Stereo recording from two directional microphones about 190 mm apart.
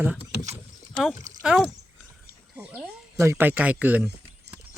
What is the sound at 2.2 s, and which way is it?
Wild animals, 5° right (ahead or behind).